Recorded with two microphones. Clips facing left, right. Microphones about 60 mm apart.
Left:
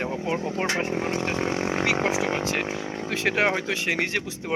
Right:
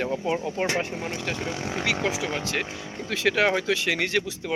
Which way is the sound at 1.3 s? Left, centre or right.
Left.